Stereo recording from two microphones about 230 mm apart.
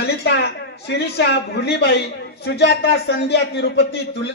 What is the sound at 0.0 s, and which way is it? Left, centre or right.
A man's voice, left.